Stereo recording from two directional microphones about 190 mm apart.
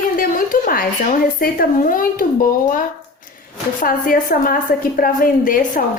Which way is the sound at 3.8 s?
45° left (ahead or behind).